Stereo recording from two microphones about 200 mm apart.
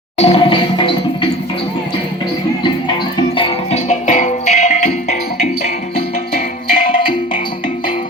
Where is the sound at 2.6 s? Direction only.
20° left (ahead or behind).